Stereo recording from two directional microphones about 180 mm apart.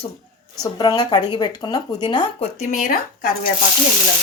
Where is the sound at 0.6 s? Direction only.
20° left (ahead or behind).